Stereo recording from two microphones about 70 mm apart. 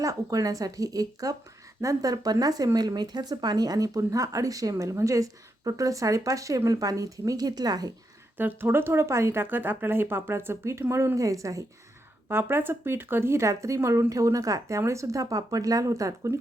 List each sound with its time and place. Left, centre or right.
0.0 s speech: right
2.7 s speech: right
8.4 s speech: right
12.3 s speech: right